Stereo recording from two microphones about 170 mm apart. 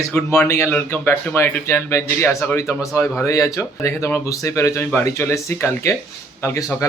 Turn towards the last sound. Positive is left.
turn(degrees=15)  # may be behind; listen again after turning